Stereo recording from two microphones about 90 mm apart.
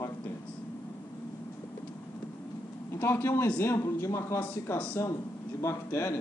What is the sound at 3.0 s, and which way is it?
Speech, 25° left (ahead or behind).